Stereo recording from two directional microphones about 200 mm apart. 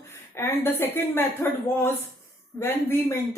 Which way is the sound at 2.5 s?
10° left (ahead or behind).